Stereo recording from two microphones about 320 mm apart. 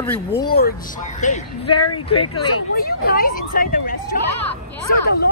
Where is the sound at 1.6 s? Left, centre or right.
Left.